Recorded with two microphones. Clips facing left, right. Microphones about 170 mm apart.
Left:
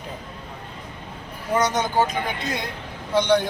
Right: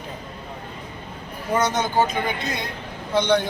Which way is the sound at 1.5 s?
10° left (ahead or behind).